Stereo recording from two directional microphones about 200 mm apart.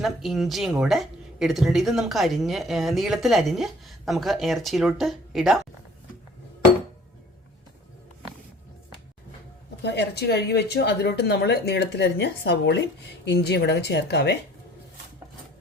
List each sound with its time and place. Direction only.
0.0 s speech: centre (ahead or behind)
9.8 s speech: 55° left (ahead or behind)